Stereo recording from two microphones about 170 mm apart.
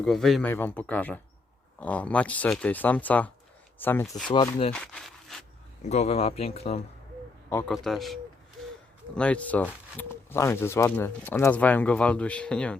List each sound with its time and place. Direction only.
0.0 s a man's voice: centre (ahead or behind)
0.4 s speech: 10° left (ahead or behind)
4.3 s speech: 30° left (ahead or behind)
4.7 s speech: 5° left (ahead or behind)
5.8 s speech: 40° left (ahead or behind)
7.7 s a man's voice: centre (ahead or behind)